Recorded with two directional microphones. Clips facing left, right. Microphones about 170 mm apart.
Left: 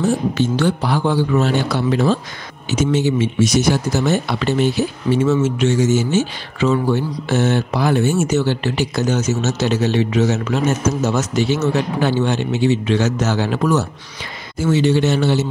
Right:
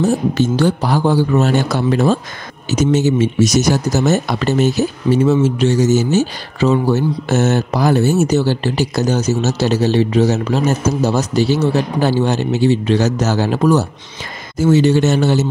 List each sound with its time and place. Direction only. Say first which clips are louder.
0.0 s speech: right 3 dB; 40° right (ahead or behind)
14.6 s speech: right 4 dB; 40° right (ahead or behind)